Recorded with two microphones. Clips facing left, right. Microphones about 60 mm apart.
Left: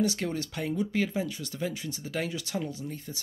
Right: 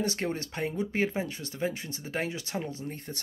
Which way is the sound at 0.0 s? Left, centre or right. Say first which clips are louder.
Left 2 dB; right.